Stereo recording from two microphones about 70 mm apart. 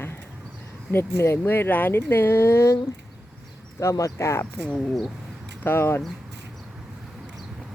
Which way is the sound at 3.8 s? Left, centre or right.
Left.